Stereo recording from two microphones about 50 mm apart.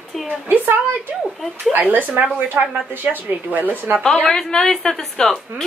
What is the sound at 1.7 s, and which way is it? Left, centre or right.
Speech, right.